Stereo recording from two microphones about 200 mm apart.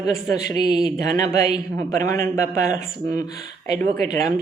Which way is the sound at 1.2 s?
20° left (ahead or behind).